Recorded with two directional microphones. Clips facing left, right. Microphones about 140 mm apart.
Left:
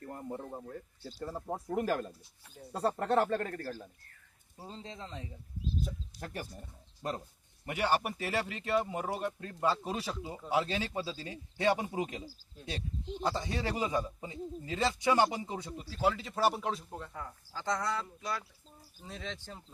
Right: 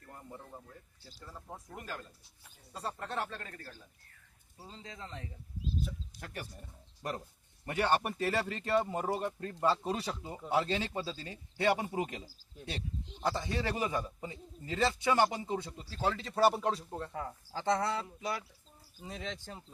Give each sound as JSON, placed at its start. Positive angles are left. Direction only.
{"t": 0.0, "sound": "speech", "side_deg": 45}
{"t": 4.7, "sound": "speech", "side_deg": 30}
{"t": 5.8, "sound": "speech", "side_deg": 35}
{"t": 7.0, "sound": "speech", "side_deg": 20}
{"t": 7.6, "sound": "speech", "side_deg": 10}
{"t": 17.2, "sound": "speech", "side_deg": -25}
{"t": 19.0, "sound": "speech", "side_deg": -5}